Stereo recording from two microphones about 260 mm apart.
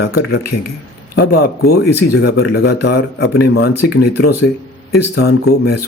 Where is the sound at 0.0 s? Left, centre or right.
Left.